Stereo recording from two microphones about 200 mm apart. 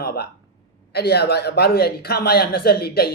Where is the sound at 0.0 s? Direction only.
50° left (ahead or behind).